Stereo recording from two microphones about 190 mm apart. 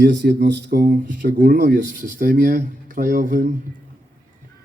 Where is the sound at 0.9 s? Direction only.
45° right (ahead or behind).